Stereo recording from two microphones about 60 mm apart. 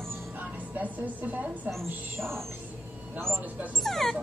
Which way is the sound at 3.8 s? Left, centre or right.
Centre.